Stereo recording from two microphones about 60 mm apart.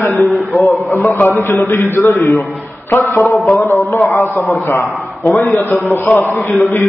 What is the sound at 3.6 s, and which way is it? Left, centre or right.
A man's voice, left.